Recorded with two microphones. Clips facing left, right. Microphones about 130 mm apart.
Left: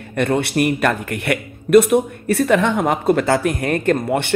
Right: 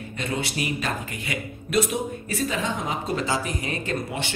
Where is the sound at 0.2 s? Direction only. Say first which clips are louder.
Left 11 dB; 60° left (ahead or behind).